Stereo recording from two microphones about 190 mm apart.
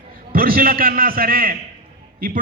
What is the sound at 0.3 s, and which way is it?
A man's voice, 50° right (ahead or behind).